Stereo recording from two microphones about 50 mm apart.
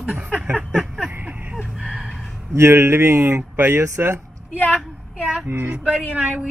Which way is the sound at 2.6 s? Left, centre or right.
Right.